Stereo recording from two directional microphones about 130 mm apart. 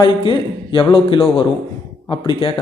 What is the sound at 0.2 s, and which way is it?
Speech, 40° left (ahead or behind).